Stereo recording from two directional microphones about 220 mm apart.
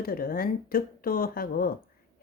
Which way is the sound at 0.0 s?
40° left (ahead or behind).